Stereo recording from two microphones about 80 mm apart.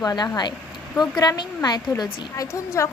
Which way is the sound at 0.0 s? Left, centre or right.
Left.